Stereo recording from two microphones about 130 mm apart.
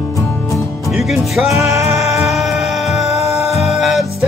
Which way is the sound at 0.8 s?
Centre (ahead or behind).